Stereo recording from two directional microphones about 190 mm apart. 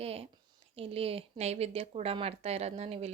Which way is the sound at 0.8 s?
30° right (ahead or behind).